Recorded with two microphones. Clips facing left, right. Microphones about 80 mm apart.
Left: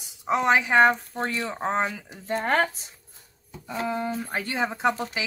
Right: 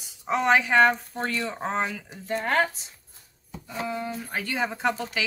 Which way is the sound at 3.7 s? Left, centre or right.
Left.